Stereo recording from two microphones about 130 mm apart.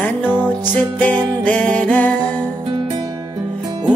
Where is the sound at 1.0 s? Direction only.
10° left (ahead or behind).